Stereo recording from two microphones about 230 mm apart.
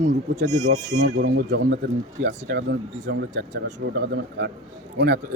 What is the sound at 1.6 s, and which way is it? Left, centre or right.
Speech, right.